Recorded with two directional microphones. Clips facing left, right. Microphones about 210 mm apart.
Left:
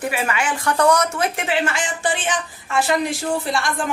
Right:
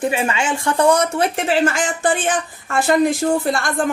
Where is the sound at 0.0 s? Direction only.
25° right (ahead or behind); by 3.7 s 50° right (ahead or behind).